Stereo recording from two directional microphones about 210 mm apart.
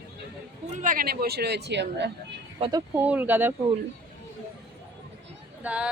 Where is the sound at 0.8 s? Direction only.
40° right (ahead or behind).